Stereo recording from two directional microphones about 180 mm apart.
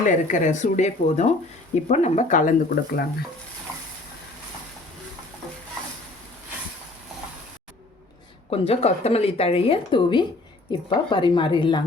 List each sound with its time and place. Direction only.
0.0 s speech: 45° left (ahead or behind)
8.4 s a woman's voice: 30° left (ahead or behind)